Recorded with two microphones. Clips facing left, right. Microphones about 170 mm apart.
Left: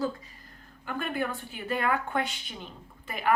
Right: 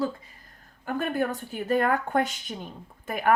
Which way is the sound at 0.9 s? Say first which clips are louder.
Right 4 dB; 45° right (ahead or behind).